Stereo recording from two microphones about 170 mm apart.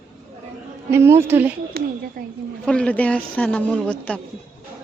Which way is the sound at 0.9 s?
15° right (ahead or behind).